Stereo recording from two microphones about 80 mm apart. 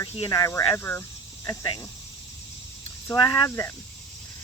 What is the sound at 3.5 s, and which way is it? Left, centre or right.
Speech, left.